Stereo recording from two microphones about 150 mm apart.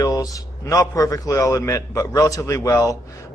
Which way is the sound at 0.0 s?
25° left (ahead or behind).